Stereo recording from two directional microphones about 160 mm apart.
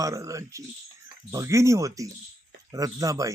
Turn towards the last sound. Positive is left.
turn(degrees=-20)  # may be behind; listen again after turning